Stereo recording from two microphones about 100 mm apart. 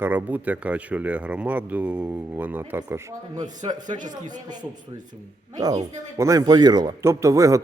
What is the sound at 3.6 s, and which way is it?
Speech, 70° right (ahead or behind).